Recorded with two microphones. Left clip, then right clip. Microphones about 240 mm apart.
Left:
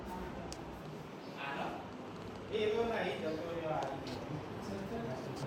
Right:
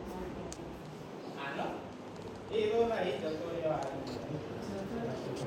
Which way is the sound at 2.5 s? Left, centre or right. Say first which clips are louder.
Right 3 dB; centre.